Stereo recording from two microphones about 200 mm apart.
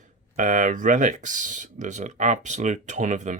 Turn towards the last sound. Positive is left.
turn(degrees=-35)  # may be behind; listen again after turning